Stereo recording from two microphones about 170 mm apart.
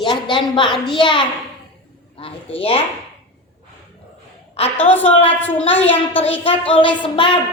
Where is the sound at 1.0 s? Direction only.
30° left (ahead or behind).